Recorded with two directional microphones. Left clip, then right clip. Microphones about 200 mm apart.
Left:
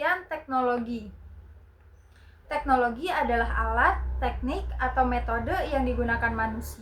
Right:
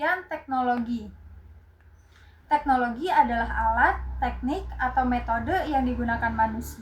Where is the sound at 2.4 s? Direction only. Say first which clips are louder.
Right 2 dB; 5° left (ahead or behind).